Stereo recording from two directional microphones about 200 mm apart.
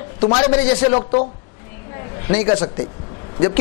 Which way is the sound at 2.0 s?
20° left (ahead or behind).